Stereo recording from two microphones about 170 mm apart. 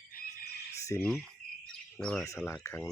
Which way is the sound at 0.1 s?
60° left (ahead or behind).